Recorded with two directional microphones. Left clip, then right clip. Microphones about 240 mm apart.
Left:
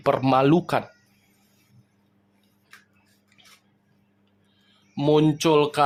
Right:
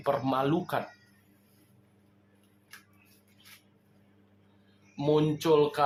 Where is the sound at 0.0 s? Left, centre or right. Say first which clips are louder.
Left 8 dB; left.